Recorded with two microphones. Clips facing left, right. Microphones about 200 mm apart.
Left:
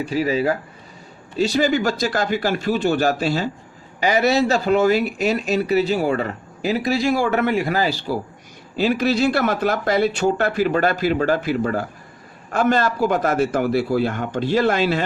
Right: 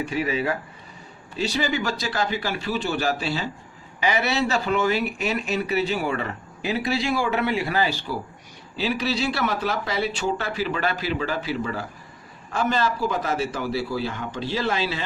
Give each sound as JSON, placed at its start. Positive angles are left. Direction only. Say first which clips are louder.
{"t": 0.0, "sound": "speech", "louder": "left 5 dB", "side_deg": 35}